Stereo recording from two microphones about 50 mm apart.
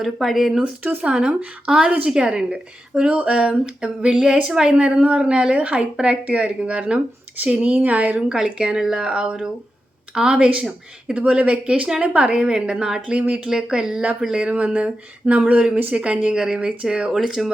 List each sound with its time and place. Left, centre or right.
0.0 s speech: centre
1.0 s a woman's voice: centre
8.3 s a woman's voice: centre
13.1 s a woman's voice: right
13.5 s a woman's voice: centre
17.1 s speech: centre